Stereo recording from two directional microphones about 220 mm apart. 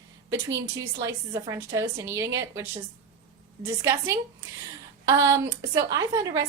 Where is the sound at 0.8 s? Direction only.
15° right (ahead or behind).